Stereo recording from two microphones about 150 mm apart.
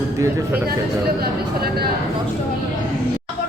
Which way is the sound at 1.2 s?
90° right.